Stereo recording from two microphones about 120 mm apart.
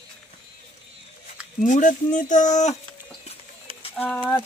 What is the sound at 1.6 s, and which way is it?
Speech, 90° left.